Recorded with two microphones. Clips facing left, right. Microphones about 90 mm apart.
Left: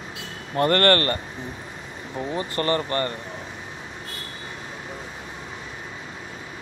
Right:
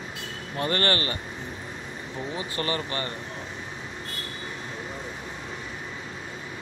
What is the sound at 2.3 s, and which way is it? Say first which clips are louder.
Speech: left 6 dB; 45° left (ahead or behind).